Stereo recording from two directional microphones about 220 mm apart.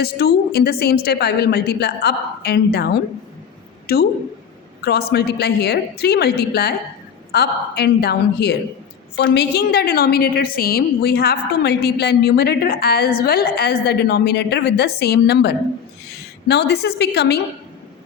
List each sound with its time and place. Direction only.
0.0 s a woman's voice: 45° left (ahead or behind)